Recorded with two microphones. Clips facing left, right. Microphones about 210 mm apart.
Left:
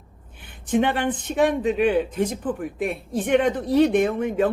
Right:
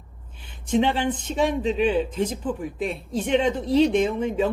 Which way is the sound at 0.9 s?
55° left (ahead or behind).